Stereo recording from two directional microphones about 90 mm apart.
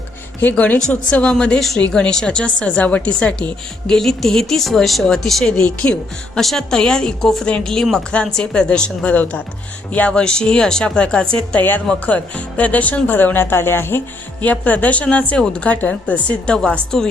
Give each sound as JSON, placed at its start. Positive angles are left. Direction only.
{"t": 0.4, "sound": "a woman's voice", "side_deg": 15}